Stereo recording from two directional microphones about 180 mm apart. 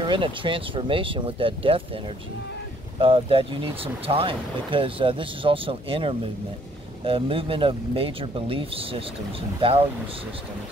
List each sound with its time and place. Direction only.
0.0 s speech: 30° right (ahead or behind)
3.0 s speech: 30° right (ahead or behind)